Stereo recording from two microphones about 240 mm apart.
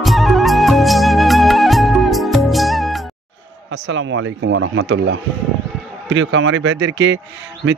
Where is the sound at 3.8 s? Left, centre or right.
Right.